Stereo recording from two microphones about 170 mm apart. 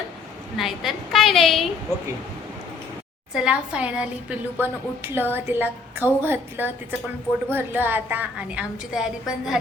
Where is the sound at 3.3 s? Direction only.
5° right (ahead or behind).